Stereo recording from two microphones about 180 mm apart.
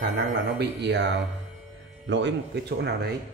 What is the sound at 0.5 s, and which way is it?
Speech, 70° right (ahead or behind).